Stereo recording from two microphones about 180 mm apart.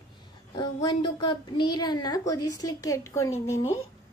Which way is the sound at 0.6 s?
25° left (ahead or behind).